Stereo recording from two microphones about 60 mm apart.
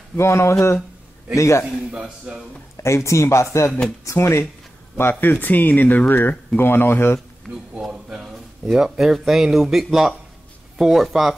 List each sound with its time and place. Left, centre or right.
0.1 s speech: left
1.9 s a man's voice: centre
2.8 s speech: left
5.3 s speech: left
7.9 s speech: centre